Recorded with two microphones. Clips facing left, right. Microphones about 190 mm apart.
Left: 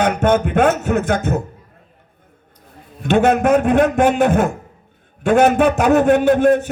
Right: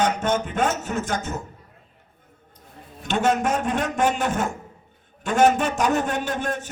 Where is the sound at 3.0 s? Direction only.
60° left (ahead or behind).